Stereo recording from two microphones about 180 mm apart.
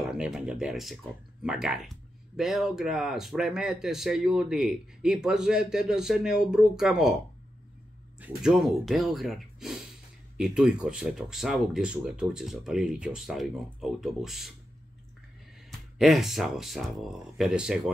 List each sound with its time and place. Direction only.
0.0 s speech: 5° right (ahead or behind)
8.4 s speech: centre (ahead or behind)
16.0 s speech: centre (ahead or behind)